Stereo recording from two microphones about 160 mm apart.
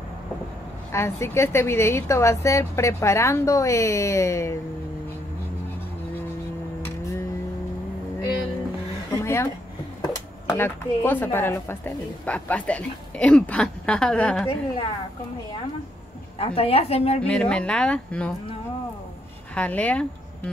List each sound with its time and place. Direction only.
0.9 s a woman's voice: 15° left (ahead or behind)
9.1 s a sound: 15° left (ahead or behind)
10.4 s a woman's voice: 15° left (ahead or behind)
16.3 s a woman's voice: 35° left (ahead or behind)
17.2 s a woman's voice: 5° left (ahead or behind)
19.5 s a woman's voice: 10° left (ahead or behind)